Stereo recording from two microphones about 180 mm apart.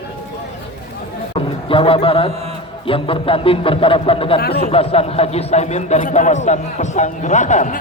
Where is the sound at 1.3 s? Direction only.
30° left (ahead or behind).